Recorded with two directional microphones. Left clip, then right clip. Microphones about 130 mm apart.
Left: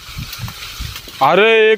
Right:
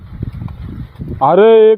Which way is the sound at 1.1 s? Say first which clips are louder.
Right 3 dB; 40° left (ahead or behind).